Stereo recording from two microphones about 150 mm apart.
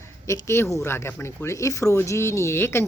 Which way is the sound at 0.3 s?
20° left (ahead or behind).